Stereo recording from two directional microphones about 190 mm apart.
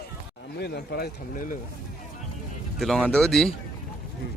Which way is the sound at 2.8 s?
5° left (ahead or behind).